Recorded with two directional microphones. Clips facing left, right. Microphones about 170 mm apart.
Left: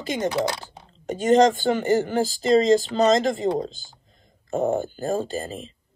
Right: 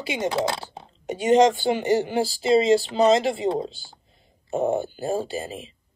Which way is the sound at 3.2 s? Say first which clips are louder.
Left 1 dB; 40° left (ahead or behind).